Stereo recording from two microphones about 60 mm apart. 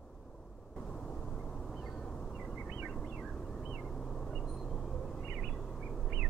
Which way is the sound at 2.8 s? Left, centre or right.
Centre.